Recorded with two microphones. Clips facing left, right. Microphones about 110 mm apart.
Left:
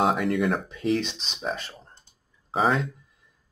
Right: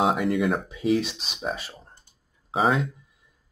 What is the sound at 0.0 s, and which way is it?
Speech, centre (ahead or behind).